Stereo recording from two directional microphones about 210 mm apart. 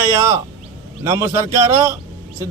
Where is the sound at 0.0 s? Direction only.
15° right (ahead or behind).